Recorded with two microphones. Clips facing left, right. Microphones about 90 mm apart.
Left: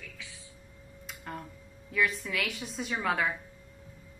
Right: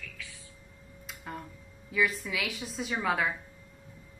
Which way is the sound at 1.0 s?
Centre (ahead or behind).